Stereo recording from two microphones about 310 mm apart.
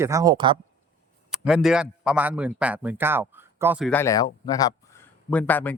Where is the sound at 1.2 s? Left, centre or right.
Centre.